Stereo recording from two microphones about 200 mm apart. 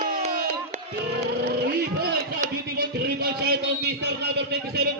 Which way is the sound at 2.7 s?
50° right (ahead or behind).